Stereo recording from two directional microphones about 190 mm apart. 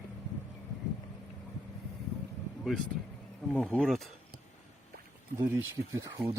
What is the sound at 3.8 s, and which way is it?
Speech, centre (ahead or behind).